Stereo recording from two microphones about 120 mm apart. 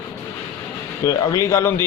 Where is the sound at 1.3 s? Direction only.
25° left (ahead or behind).